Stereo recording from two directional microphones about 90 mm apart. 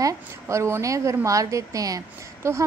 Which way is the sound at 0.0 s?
35° right (ahead or behind).